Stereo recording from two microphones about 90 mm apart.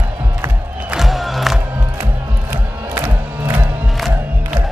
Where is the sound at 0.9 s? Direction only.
Centre (ahead or behind).